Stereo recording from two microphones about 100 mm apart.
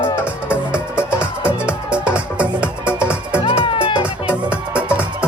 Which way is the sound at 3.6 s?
60° left (ahead or behind).